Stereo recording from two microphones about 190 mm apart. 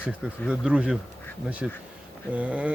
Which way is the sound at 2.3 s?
5° right (ahead or behind).